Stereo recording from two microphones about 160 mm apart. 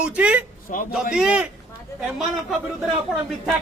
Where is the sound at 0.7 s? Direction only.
60° left (ahead or behind).